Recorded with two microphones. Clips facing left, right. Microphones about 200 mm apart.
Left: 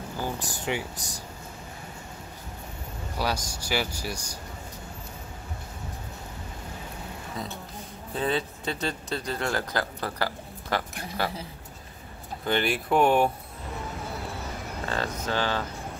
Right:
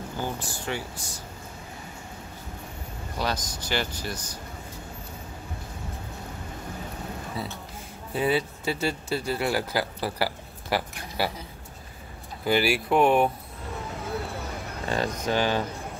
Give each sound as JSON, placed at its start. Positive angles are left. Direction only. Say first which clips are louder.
{"t": 0.5, "sound": "speech", "louder": "left 2 dB", "side_deg": 15}
{"t": 3.2, "sound": "speech", "louder": "even", "side_deg": 10}
{"t": 7.4, "sound": "speech", "louder": "right 1 dB", "side_deg": -5}
{"t": 12.4, "sound": "speech", "louder": "right 3 dB", "side_deg": -5}
{"t": 14.9, "sound": "speech", "louder": "right 4 dB", "side_deg": -15}